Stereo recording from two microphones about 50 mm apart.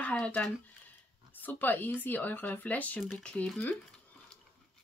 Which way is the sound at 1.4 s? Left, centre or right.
Left.